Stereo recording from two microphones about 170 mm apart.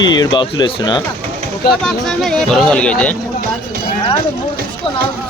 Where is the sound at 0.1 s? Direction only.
25° left (ahead or behind).